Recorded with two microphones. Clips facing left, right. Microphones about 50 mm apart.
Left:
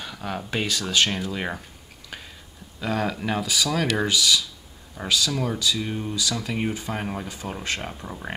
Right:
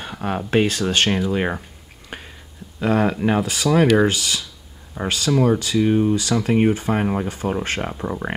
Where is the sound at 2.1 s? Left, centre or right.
Right.